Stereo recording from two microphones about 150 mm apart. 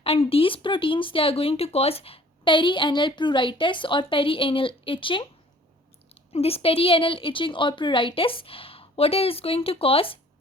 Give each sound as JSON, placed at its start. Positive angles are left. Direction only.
{"t": 0.0, "sound": "speech", "side_deg": 40}
{"t": 6.3, "sound": "speech", "side_deg": 40}